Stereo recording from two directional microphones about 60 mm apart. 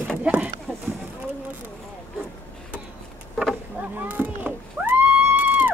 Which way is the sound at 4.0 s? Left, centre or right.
Right.